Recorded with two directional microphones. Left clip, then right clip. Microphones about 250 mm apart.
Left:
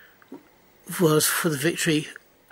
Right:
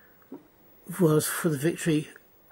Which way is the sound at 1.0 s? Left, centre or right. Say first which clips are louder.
Left 3 dB; centre.